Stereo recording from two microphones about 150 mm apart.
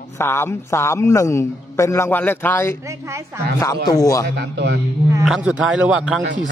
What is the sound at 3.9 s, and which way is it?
Speech, 20° left (ahead or behind).